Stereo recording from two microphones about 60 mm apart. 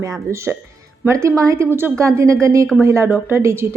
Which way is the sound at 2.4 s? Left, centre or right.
Right.